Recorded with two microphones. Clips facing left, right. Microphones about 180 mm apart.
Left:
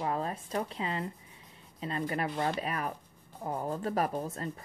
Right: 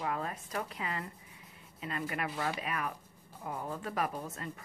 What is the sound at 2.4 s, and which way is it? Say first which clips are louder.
Speech: left 4 dB; 35° left (ahead or behind).